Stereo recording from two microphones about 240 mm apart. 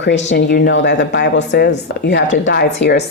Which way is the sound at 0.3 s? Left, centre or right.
Left.